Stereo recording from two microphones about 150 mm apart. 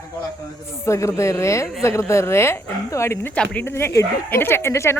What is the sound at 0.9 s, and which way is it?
Speech, 20° left (ahead or behind).